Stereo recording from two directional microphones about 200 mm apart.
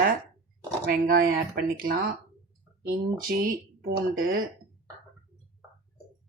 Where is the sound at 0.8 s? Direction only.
45° right (ahead or behind).